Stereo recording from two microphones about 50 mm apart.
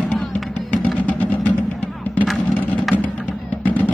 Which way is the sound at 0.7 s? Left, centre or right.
Left.